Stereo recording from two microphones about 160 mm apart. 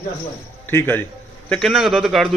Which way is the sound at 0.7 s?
15° left (ahead or behind).